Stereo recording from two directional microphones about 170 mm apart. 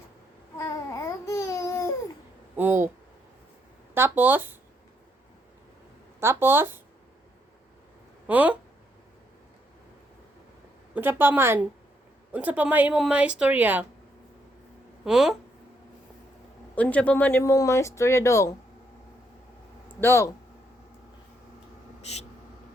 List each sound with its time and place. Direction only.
0.5 s babbling: 20° left (ahead or behind)
2.6 s speech: 15° right (ahead or behind)
3.9 s speech: 10° right (ahead or behind)
6.1 s speech: 15° right (ahead or behind)
8.3 s speech: 10° right (ahead or behind)
10.9 s speech: 10° right (ahead or behind)
15.0 s speech: 5° right (ahead or behind)
16.7 s speech: 10° left (ahead or behind)
20.0 s speech: 15° left (ahead or behind)
22.0 s speech: 40° left (ahead or behind)